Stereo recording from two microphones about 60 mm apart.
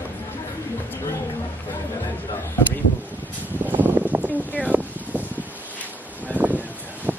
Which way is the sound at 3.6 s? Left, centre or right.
Right.